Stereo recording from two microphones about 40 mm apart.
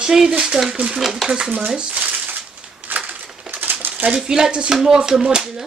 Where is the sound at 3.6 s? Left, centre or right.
Right.